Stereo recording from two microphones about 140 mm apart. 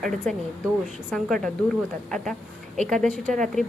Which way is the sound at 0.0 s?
Centre (ahead or behind).